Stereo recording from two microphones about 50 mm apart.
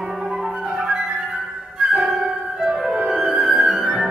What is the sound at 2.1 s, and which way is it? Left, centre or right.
Music, centre.